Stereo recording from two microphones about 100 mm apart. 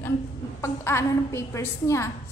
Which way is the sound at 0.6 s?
25° left (ahead or behind).